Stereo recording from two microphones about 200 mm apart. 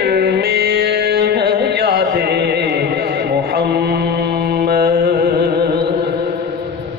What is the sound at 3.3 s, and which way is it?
Mantra, 50° right (ahead or behind).